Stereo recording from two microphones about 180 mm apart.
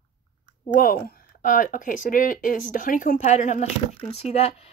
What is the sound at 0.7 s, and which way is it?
Speech, 50° left (ahead or behind).